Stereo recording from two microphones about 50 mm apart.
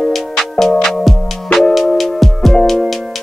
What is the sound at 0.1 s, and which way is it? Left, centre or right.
Music, centre.